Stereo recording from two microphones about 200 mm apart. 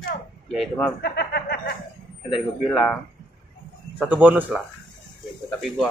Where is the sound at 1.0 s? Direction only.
55° left (ahead or behind).